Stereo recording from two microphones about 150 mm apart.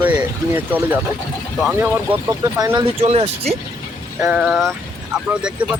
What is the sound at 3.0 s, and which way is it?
Speech, 45° right (ahead or behind).